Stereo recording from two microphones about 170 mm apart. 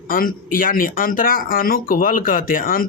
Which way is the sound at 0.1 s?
55° left (ahead or behind).